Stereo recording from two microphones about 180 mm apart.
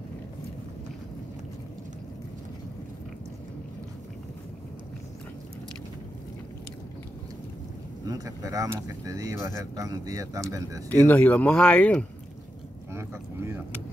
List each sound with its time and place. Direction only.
8.1 s speech: 20° right (ahead or behind)
10.9 s speech: 10° left (ahead or behind)
12.9 s a sound: 15° right (ahead or behind)